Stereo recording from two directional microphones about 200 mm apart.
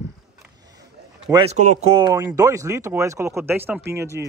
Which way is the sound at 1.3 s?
30° right (ahead or behind).